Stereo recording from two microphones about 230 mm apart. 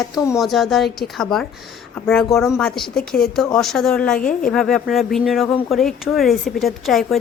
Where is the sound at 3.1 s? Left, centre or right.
Left.